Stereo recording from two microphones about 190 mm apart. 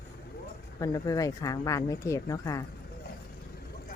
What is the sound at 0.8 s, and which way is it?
Speech, 20° left (ahead or behind).